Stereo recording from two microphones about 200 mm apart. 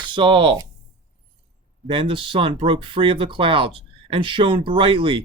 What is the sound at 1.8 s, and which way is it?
Speech, 25° right (ahead or behind).